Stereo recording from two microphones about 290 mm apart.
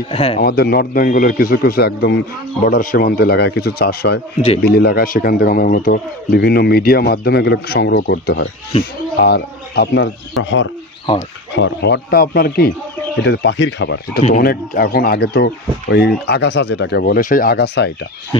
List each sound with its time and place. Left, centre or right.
0.1 s speech: centre
0.4 s speech: left
8.7 s speech: centre
9.2 s speech: left